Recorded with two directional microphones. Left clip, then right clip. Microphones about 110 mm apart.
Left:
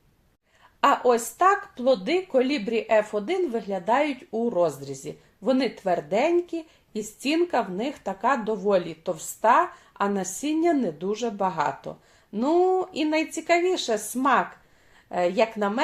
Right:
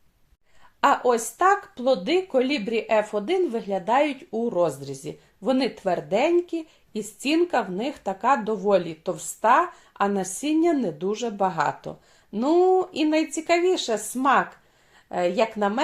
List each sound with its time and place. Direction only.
0.8 s speech: 15° right (ahead or behind)